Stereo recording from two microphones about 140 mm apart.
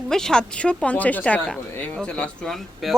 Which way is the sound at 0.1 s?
5° left (ahead or behind).